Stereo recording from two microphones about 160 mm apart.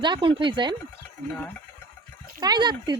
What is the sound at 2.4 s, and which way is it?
Speech, 25° right (ahead or behind).